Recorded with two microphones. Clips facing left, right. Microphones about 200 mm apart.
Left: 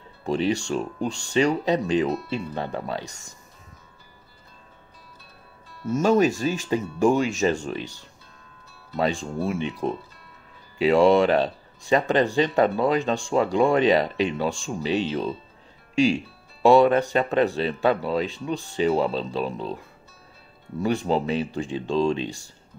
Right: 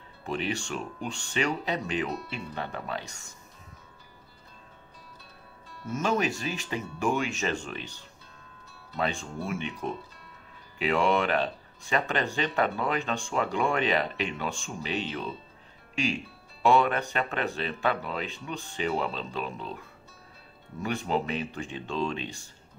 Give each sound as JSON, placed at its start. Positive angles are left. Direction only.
{"t": 0.2, "sound": "speech", "side_deg": 35}
{"t": 5.7, "sound": "music", "side_deg": 5}
{"t": 5.9, "sound": "speech", "side_deg": 40}
{"t": 8.9, "sound": "speech", "side_deg": 35}
{"t": 16.6, "sound": "speech", "side_deg": 35}
{"t": 20.8, "sound": "speech", "side_deg": 35}